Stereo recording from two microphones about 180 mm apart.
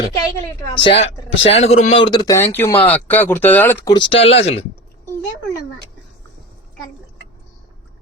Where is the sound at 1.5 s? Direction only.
35° left (ahead or behind); by 3.9 s 10° left (ahead or behind).